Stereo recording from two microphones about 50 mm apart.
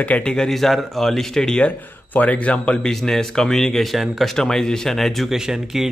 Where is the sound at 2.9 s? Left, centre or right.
Centre.